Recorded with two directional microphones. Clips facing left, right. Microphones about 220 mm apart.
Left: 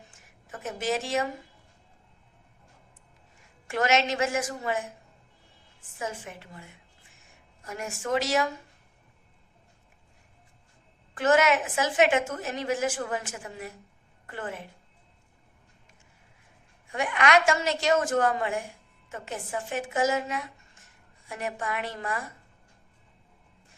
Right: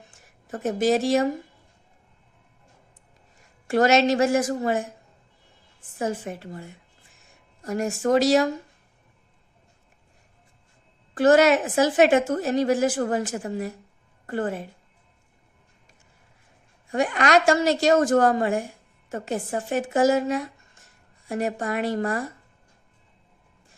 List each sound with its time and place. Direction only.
0.1 s speech: 35° right (ahead or behind)
3.7 s a woman's voice: 35° right (ahead or behind)
6.0 s a woman's voice: 35° right (ahead or behind)
11.1 s a woman's voice: 35° right (ahead or behind)
16.9 s a woman's voice: 35° right (ahead or behind)